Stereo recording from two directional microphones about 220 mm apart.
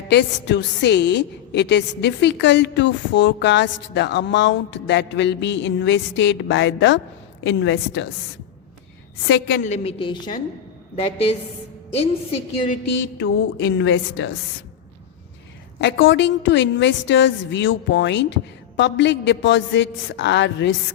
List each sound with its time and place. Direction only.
0.1 s a woman's voice: 50° left (ahead or behind)
9.2 s a woman's voice: 60° left (ahead or behind)
9.6 s a woman's voice: 30° left (ahead or behind)
13.0 s a woman's voice: 55° left (ahead or behind)
15.8 s a woman's voice: 55° left (ahead or behind)